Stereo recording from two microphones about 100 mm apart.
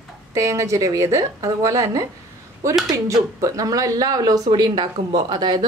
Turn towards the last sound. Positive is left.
turn(degrees=-50)  # may be behind; listen again after turning